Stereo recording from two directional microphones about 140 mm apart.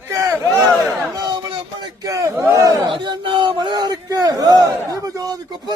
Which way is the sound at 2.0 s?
25° right (ahead or behind).